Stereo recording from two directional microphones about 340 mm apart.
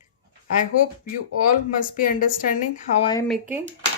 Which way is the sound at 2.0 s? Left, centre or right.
Left.